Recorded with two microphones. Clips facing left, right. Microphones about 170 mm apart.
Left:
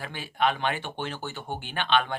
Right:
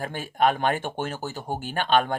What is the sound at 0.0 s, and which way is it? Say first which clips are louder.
Speech: right 4 dB; 45° right (ahead or behind).